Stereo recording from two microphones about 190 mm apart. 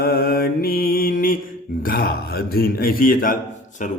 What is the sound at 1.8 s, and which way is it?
A man's voice, 50° left (ahead or behind).